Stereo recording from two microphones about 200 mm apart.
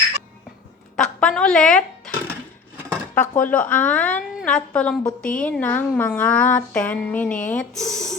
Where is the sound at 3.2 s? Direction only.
10° left (ahead or behind).